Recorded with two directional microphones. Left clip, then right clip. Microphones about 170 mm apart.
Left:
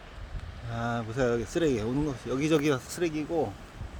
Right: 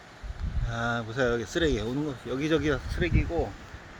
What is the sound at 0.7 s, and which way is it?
Speech, 5° left (ahead or behind).